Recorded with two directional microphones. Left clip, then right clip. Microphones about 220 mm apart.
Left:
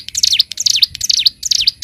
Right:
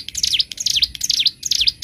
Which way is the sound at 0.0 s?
20° left (ahead or behind).